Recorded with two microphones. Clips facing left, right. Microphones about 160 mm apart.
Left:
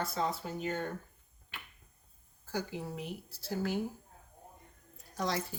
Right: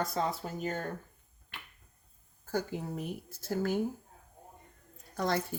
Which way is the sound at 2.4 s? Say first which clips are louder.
Right 3 dB; 50° right (ahead or behind).